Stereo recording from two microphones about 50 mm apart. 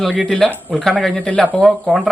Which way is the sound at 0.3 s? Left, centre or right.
Centre.